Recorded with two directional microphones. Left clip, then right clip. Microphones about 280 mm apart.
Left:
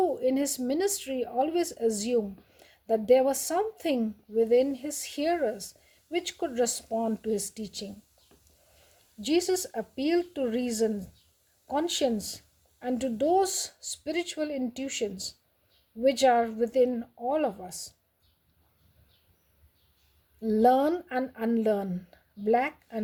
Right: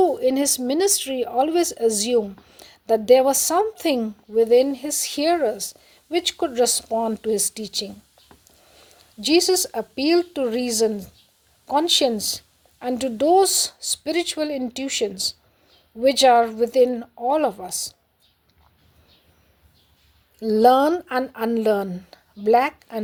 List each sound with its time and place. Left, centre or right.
0.0 s a woman's voice: centre
9.2 s a woman's voice: centre
20.4 s a woman's voice: centre